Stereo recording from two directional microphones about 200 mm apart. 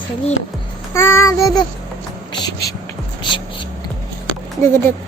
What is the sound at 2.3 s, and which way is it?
Music, 20° left (ahead or behind).